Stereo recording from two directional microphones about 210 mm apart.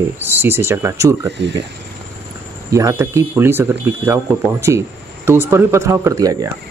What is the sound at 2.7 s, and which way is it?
Speech, 15° right (ahead or behind).